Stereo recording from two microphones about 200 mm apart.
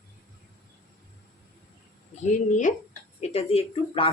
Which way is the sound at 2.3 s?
40° left (ahead or behind).